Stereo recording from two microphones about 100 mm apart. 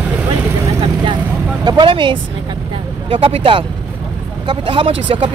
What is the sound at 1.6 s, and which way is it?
Speech, 55° right (ahead or behind).